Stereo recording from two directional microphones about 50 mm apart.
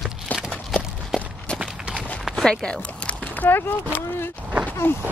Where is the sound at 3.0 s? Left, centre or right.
Left.